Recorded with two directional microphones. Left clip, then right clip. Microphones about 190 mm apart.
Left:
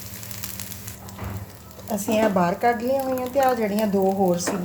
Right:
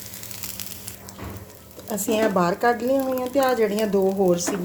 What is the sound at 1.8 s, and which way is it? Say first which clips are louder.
A woman's voice: left 1 dB; 30° right (ahead or behind).